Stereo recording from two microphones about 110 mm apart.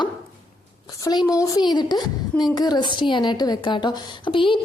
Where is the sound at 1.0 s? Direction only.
30° left (ahead or behind).